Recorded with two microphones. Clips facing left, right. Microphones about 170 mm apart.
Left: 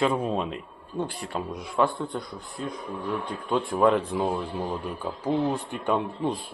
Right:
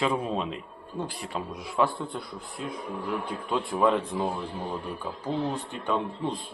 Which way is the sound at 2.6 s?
40° left (ahead or behind).